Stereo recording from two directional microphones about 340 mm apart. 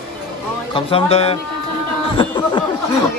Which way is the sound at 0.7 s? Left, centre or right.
Centre.